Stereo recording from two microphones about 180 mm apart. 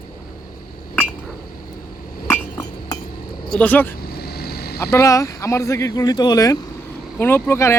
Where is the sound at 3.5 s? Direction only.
10° left (ahead or behind).